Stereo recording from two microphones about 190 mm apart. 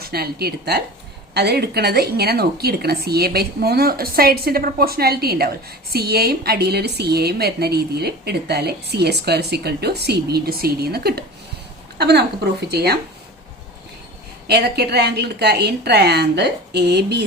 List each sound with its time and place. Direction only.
0.0 s a woman's voice: 55° right (ahead or behind)
14.4 s a woman's voice: 60° right (ahead or behind)